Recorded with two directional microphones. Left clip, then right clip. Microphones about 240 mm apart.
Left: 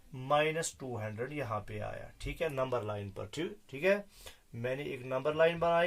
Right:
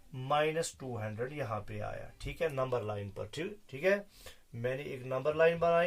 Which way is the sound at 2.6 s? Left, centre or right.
Left.